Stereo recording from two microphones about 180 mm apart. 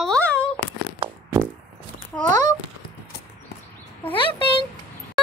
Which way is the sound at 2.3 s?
40° right (ahead or behind).